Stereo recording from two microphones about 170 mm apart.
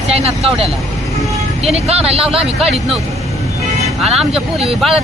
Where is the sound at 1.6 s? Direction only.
40° right (ahead or behind).